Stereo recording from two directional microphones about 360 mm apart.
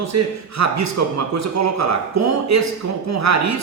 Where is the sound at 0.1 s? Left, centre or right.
Right.